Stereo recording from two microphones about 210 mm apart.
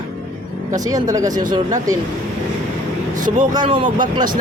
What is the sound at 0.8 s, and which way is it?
Speech, 15° right (ahead or behind).